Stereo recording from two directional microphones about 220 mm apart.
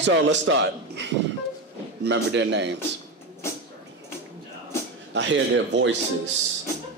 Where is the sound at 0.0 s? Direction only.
55° right (ahead or behind).